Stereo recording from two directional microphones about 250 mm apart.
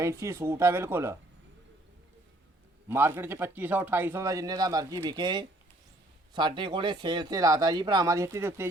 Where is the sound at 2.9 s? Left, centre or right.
Centre.